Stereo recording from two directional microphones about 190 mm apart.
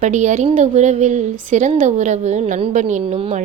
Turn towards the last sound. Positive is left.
turn(degrees=-35)  # may be behind; listen again after turning